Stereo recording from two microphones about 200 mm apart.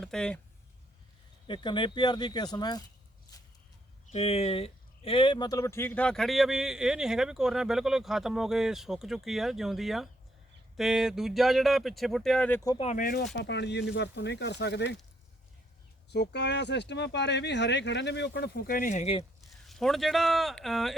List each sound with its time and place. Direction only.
0.0 s speech: 5° left (ahead or behind)
1.5 s speech: 25° left (ahead or behind)
3.3 s a sound: 15° left (ahead or behind)
4.1 s speech: 30° left (ahead or behind); by 12.7 s 10° left (ahead or behind)
12.7 s speech: 35° left (ahead or behind)
13.3 s speech: 60° left (ahead or behind)
16.0 s speech: 55° left (ahead or behind); by 19.2 s 35° left (ahead or behind)
19.6 s speech: centre (ahead or behind)